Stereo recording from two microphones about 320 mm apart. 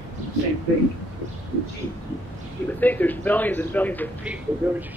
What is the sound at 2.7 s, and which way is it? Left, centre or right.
A man's voice, centre.